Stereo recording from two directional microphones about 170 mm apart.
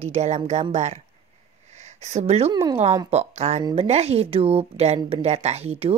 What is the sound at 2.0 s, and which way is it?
Speech, 40° right (ahead or behind).